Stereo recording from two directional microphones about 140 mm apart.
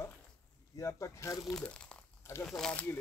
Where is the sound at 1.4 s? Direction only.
5° left (ahead or behind).